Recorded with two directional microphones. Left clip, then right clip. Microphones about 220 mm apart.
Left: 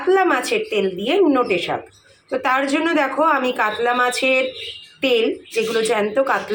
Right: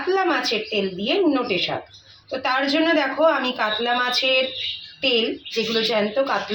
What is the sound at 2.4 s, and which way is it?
A woman's voice, 15° left (ahead or behind).